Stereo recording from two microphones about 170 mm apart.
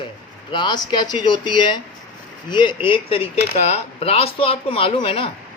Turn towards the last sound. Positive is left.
turn(degrees=35)  # may be behind; listen again after turning